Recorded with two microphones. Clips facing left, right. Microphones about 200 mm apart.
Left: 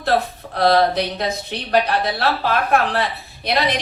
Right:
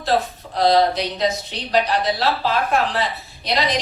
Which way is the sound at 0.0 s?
60° left (ahead or behind).